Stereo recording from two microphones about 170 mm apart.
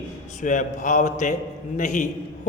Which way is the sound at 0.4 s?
50° left (ahead or behind).